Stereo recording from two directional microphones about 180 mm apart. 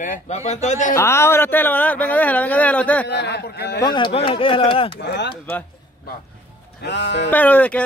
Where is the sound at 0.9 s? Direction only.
15° left (ahead or behind).